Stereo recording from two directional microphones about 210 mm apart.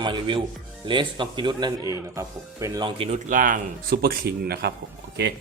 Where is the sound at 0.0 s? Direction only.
25° right (ahead or behind).